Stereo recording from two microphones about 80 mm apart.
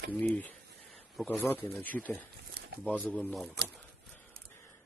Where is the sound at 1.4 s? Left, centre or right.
Left.